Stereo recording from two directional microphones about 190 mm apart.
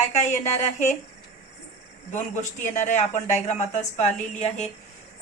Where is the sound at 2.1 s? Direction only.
40° left (ahead or behind).